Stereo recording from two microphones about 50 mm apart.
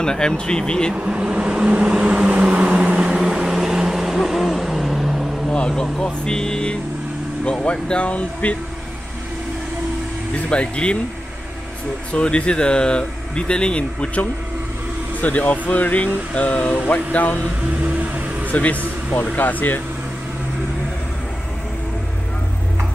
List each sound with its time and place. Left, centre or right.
0.0 s speech: centre
0.9 s vehicle: centre
5.5 s speech: centre
10.5 s speech: left
12.1 s speech: left
15.2 s speech: left
17.8 s vehicle: right
18.5 s speech: left